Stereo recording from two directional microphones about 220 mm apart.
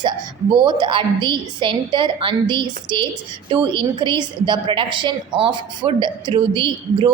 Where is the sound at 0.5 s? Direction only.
20° right (ahead or behind).